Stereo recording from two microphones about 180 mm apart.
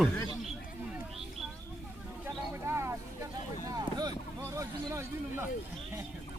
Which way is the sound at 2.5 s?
15° right (ahead or behind).